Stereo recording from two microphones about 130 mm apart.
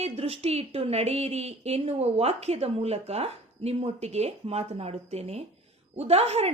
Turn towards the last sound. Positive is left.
turn(degrees=-55)  # may be behind; listen again after turning